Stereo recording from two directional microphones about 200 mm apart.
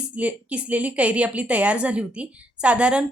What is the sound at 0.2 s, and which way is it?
A woman's voice, 5° right (ahead or behind).